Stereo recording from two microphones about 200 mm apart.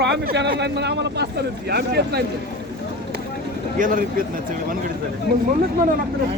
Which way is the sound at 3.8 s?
45° right (ahead or behind).